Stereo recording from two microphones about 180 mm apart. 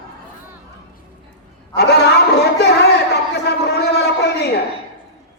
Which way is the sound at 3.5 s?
65° left (ahead or behind).